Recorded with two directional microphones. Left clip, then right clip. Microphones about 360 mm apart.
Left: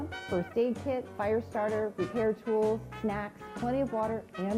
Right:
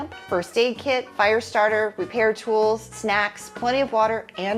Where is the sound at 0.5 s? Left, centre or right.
Centre.